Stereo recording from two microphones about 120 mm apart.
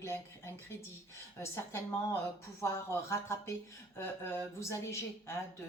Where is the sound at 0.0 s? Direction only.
20° left (ahead or behind).